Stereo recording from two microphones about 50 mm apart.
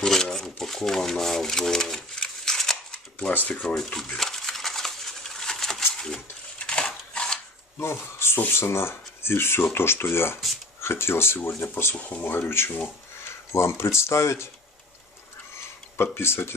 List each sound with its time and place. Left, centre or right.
0.0 s typewriter: centre
3.6 s speech: centre
4.2 s a sound: centre
7.8 s speech: left
12.0 s speech: left
12.3 s speech: left
13.5 s speech: left
16.0 s speech: left